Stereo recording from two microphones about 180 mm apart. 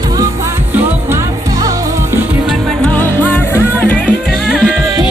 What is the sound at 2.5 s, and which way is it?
Music, 5° left (ahead or behind).